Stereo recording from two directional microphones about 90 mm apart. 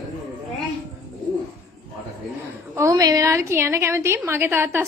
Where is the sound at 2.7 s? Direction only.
40° right (ahead or behind).